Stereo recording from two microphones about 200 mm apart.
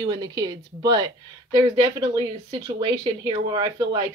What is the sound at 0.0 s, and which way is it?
A woman's voice, 20° right (ahead or behind).